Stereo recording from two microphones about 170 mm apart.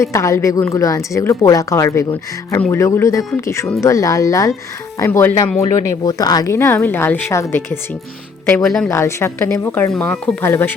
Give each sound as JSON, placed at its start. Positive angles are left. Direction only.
{"t": 0.0, "sound": "speech", "side_deg": 20}
{"t": 8.9, "sound": "speech", "side_deg": 15}